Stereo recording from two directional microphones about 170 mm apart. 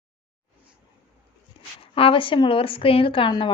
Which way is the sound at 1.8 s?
30° left (ahead or behind).